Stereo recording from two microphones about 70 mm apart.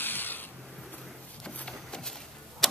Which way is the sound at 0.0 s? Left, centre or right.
Left.